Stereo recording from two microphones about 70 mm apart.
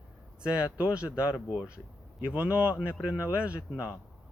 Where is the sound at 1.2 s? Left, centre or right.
Left.